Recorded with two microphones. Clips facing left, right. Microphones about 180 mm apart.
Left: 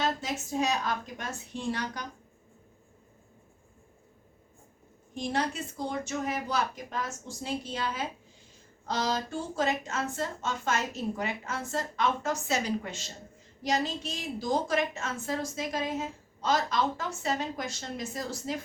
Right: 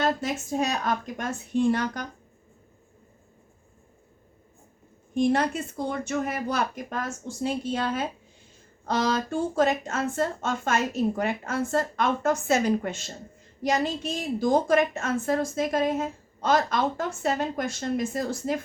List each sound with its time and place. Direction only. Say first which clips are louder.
0.0 s a woman's voice: right 5 dB; 55° right (ahead or behind)
5.1 s a woman's voice: right 8 dB; 55° right (ahead or behind)